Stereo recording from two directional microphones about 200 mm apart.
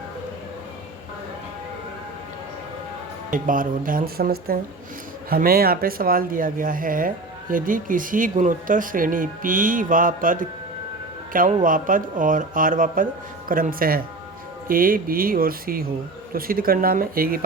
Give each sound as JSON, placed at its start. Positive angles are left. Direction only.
{"t": 3.2, "sound": "speech", "side_deg": -40}